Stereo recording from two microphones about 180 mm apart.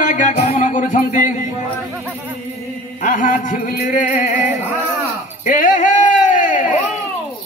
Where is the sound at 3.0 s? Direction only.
45° left (ahead or behind).